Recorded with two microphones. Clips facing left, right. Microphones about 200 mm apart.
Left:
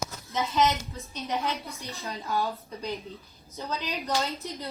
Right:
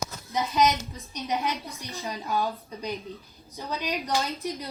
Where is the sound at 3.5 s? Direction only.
15° right (ahead or behind).